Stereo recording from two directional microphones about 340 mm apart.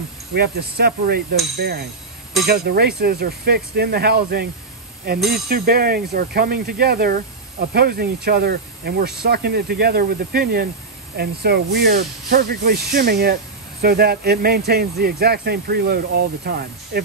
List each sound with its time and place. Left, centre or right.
0.3 s speech: right